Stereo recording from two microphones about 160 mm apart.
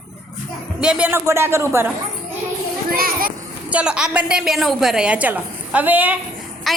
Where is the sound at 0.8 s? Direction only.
5° right (ahead or behind).